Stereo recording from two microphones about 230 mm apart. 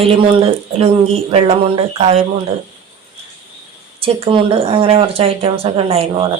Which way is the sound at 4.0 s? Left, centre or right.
Right.